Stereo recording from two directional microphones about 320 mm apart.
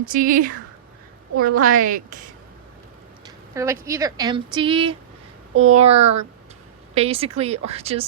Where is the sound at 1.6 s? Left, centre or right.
Right.